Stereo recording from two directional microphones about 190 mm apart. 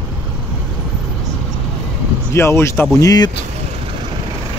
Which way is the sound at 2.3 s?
15° left (ahead or behind).